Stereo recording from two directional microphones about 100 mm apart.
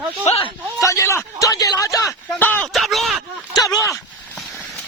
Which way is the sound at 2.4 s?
20° left (ahead or behind).